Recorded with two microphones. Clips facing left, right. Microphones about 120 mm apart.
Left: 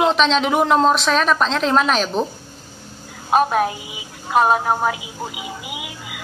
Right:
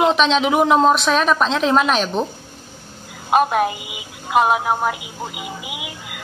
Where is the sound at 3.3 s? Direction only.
5° right (ahead or behind).